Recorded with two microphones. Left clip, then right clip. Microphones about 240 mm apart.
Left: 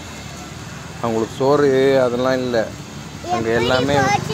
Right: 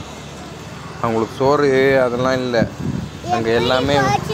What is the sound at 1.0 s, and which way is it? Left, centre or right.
Speech, centre.